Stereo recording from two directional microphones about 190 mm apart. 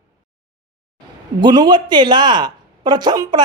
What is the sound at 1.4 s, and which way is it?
Speech, 20° right (ahead or behind).